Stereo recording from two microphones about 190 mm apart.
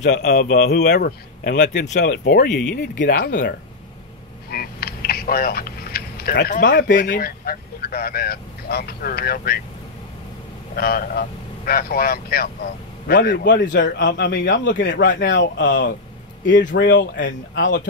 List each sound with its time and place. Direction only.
0.0 s speech: 40° left (ahead or behind)
0.3 s speech: 55° left (ahead or behind)
4.5 s a sound: 55° left (ahead or behind)
6.5 s speech: 45° left (ahead or behind)
10.8 s speech: 55° left (ahead or behind)
13.7 s speech: 75° left (ahead or behind)